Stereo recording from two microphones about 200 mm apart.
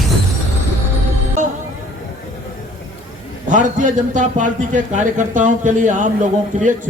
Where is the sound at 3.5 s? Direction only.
40° right (ahead or behind).